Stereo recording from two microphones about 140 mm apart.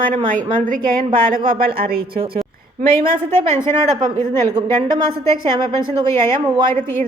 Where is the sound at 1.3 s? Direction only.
90° right.